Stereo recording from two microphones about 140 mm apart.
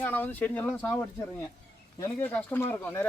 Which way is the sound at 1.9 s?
25° left (ahead or behind).